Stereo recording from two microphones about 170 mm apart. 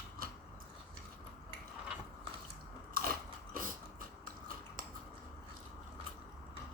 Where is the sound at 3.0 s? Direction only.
55° right (ahead or behind).